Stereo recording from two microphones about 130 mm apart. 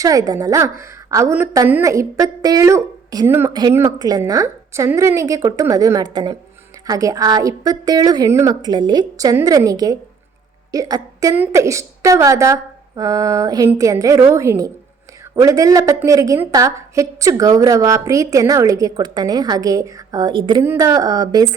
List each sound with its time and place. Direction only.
0.0 s a woman's voice: 25° right (ahead or behind)
3.5 s a woman's voice: 30° right (ahead or behind)